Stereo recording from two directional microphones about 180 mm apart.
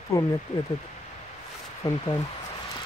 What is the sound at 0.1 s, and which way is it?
Speech, 15° left (ahead or behind).